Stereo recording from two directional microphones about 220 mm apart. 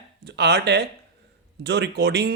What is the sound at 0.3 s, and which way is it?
Speech, 50° right (ahead or behind).